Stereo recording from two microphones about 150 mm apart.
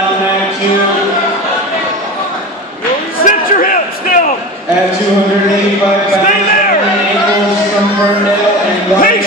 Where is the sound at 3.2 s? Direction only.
65° left (ahead or behind).